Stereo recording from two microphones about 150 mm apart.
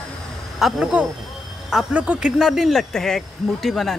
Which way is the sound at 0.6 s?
5° right (ahead or behind).